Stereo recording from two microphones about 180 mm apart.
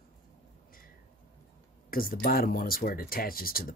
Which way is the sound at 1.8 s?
55° left (ahead or behind).